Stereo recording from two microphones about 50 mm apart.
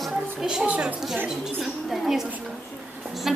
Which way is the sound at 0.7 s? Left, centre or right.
Right.